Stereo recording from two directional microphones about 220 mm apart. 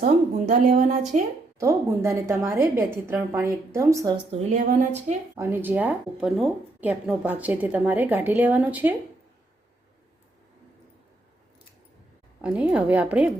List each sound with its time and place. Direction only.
0.0 s speech: 35° right (ahead or behind)
1.5 s speech: 15° right (ahead or behind); by 5.1 s 35° right (ahead or behind)
5.3 s speech: 10° right (ahead or behind)
12.4 s a woman's voice: 5° right (ahead or behind)